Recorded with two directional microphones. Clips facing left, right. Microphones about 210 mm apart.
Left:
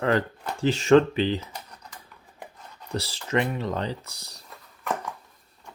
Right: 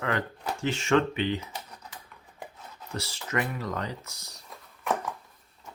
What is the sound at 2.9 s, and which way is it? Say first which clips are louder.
Speech: left 5 dB; 35° left (ahead or behind).